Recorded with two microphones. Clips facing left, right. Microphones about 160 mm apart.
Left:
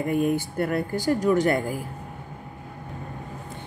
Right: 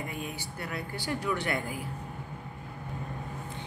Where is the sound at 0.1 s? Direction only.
50° left (ahead or behind).